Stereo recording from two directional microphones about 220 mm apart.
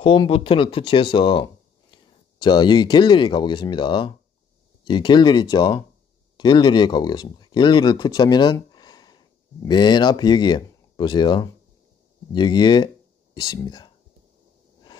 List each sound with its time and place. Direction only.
0.0 s speech: 25° left (ahead or behind)